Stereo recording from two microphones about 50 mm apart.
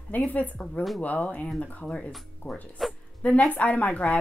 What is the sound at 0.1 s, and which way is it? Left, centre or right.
Speech, left.